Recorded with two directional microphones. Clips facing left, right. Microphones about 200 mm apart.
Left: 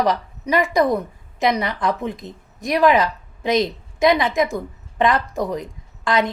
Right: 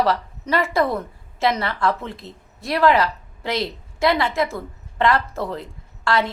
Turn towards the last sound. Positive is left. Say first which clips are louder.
# left 1 dB
turn(degrees=15)  # may be behind; listen again after turning